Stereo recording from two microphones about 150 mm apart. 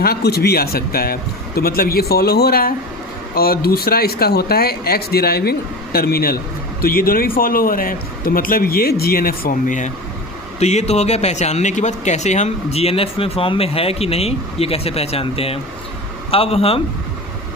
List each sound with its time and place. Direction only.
0.0 s speech: 90° left
6.8 s speech: 80° left; by 9.9 s 60° left (ahead or behind)
10.6 s a man's voice: 45° left (ahead or behind)